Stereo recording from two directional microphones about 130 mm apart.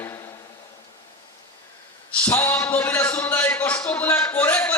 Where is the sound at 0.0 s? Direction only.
20° left (ahead or behind).